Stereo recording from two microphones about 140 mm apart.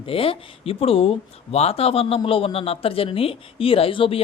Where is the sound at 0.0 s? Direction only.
40° left (ahead or behind).